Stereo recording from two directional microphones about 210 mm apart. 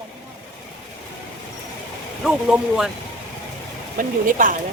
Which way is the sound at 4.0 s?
40° right (ahead or behind).